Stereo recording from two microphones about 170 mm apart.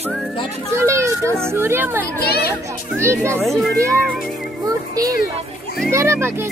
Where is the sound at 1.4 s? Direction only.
15° right (ahead or behind).